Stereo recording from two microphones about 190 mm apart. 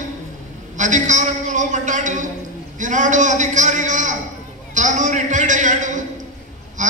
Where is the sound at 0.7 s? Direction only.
40° right (ahead or behind).